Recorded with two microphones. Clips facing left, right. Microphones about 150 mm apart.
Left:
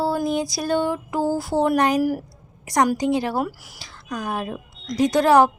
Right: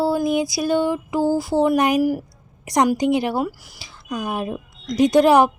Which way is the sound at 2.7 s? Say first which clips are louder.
Right 2 dB; 15° right (ahead or behind).